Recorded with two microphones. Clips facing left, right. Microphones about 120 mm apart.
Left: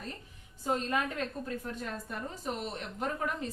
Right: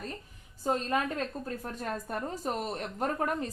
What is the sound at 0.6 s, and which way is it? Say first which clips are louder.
A woman's voice: right 2 dB; 35° right (ahead or behind).